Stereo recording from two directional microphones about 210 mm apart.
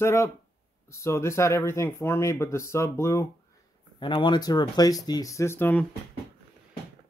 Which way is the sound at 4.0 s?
20° left (ahead or behind).